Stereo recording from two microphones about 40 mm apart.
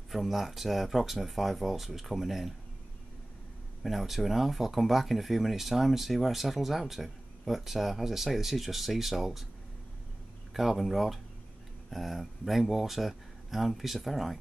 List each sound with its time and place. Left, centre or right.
0.1 s speech: centre
3.8 s speech: centre
10.5 s speech: centre